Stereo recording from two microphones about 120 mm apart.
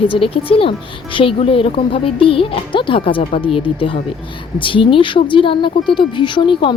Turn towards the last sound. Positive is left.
turn(degrees=45)  # may be behind; listen again after turning